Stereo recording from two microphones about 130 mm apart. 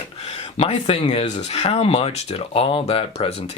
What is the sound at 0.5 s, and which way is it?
Speech, 50° left (ahead or behind).